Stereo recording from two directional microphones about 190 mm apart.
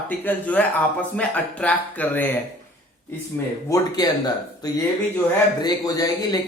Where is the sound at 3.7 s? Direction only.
15° left (ahead or behind).